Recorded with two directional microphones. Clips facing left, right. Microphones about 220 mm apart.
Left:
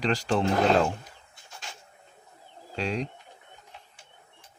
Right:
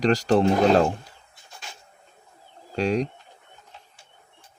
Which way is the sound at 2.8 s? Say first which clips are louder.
Right 7 dB; 45° right (ahead or behind).